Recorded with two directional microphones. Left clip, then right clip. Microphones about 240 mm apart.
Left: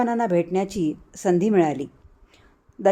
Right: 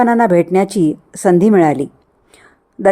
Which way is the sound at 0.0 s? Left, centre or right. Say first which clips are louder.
Right 10 dB; right.